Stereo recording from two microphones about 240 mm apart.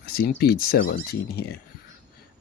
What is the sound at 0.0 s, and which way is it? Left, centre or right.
Speech, left.